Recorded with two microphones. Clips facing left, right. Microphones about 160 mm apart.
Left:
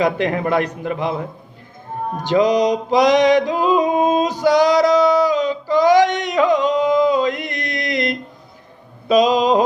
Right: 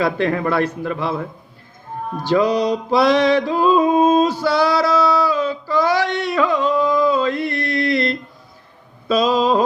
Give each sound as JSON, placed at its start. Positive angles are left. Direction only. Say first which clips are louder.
{"t": 0.0, "sound": "a man's voice", "louder": "even", "side_deg": 15}
{"t": 2.1, "sound": "music", "louder": "left 1 dB", "side_deg": 20}
{"t": 9.0, "sound": "a man's voice", "louder": "left 2 dB", "side_deg": 15}